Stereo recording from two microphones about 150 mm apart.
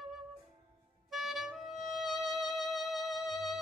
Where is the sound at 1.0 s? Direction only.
Centre (ahead or behind).